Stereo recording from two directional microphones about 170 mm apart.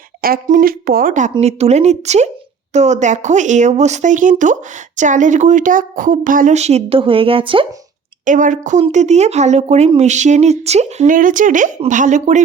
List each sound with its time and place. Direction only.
0.2 s speech: 55° right (ahead or behind); by 7.7 s 30° right (ahead or behind)
8.2 s speech: 50° right (ahead or behind)